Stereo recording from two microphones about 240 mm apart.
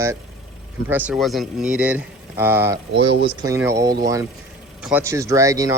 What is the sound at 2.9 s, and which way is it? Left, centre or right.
Speech, right.